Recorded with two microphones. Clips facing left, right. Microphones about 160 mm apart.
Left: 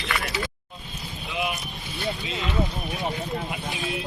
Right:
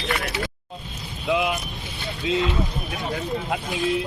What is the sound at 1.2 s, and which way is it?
Vehicle, 90° right.